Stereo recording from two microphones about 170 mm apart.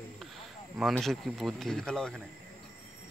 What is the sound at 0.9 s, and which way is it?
Speech, centre (ahead or behind).